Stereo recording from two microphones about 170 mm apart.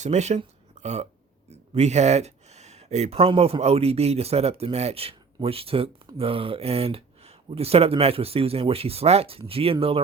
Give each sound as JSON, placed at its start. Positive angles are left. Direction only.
{"t": 0.0, "sound": "speech", "side_deg": -40}